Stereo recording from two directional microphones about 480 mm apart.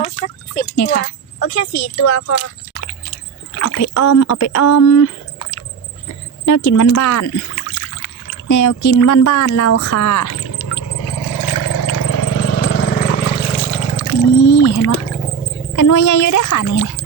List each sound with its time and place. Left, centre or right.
0.9 s speech: left
3.5 s speech: left
6.4 s a sound: left
9.0 s speech: left
11.5 s vehicle: left
12.0 s vehicle: left; by 13.9 s centre
14.1 s a sound: left
15.7 s speech: left